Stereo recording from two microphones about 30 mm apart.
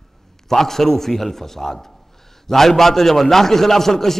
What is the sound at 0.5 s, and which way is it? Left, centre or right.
A man's voice, centre.